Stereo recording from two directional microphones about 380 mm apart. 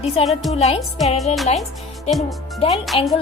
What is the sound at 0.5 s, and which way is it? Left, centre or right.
Speech, centre.